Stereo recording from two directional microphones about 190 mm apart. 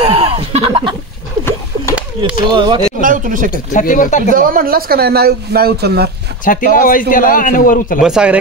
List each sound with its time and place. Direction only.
0.0 s a sound: 30° right (ahead or behind)
2.4 s speech: 25° right (ahead or behind)
3.0 s speech: 45° right (ahead or behind)
3.5 s a man's voice: 45° left (ahead or behind)
4.4 s speech: 50° right (ahead or behind)
6.4 s a man's voice: 45° left (ahead or behind)
8.0 s speech: 5° right (ahead or behind)